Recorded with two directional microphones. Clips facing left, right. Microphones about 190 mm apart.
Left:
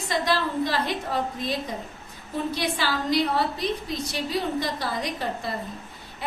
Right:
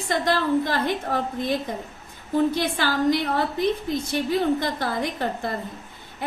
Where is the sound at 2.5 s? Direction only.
50° right (ahead or behind).